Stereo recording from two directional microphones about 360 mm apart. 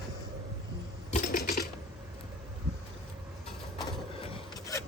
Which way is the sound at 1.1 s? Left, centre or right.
Left.